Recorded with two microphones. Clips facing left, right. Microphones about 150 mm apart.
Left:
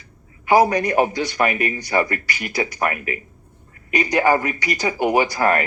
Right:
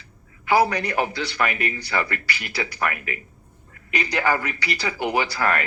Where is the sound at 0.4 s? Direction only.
45° left (ahead or behind).